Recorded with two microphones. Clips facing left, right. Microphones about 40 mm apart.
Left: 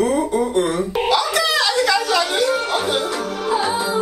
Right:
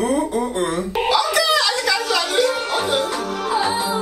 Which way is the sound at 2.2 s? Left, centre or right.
Centre.